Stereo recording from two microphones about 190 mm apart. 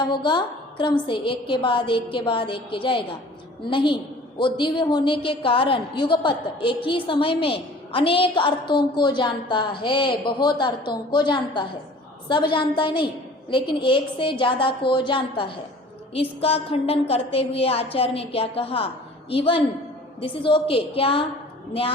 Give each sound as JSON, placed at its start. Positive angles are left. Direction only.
{"t": 0.0, "sound": "a woman's voice", "side_deg": 25}